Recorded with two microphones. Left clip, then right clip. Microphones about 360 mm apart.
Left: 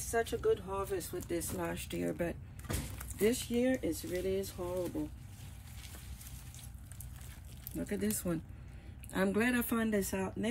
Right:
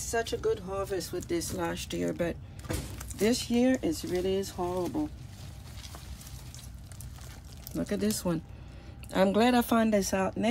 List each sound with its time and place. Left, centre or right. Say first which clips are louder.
0.1 s speech: right 2 dB; centre
3.2 s speech: right 5 dB; centre
7.7 s speech: right 6 dB; centre
9.1 s speech: right 8 dB; centre